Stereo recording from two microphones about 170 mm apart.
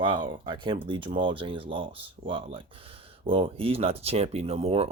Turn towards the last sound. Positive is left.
turn(degrees=-35)  # may be behind; listen again after turning